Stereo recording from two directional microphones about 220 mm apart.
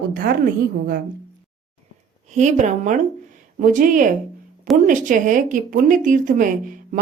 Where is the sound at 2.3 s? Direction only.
35° right (ahead or behind).